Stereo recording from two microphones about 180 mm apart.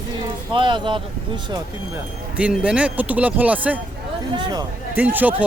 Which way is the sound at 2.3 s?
5° right (ahead or behind).